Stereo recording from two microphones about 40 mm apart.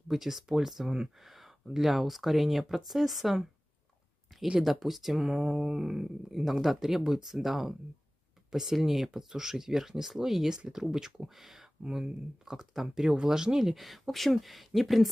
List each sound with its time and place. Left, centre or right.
0.1 s speech: centre
4.6 s speech: centre
6.4 s speech: centre
13.7 s speech: centre